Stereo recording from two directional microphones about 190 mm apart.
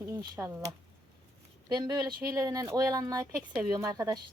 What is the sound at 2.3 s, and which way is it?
Speech, 15° right (ahead or behind).